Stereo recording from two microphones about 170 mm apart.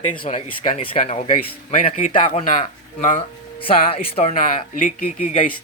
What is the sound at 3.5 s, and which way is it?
Speech, 35° left (ahead or behind).